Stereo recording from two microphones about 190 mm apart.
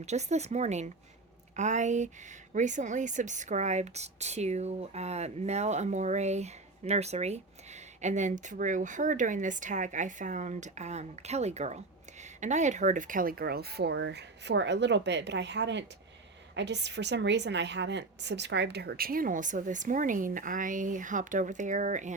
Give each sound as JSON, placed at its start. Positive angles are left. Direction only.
{"t": 0.0, "sound": "a woman's voice", "side_deg": -35}